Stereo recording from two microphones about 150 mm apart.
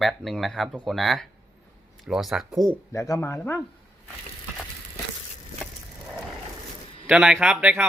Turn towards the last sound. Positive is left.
turn(degrees=-10)  # may be behind; listen again after turning